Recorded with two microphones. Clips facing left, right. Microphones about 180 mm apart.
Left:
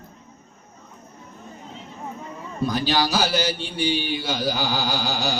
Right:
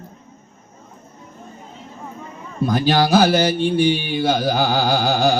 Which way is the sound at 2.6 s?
50° right (ahead or behind).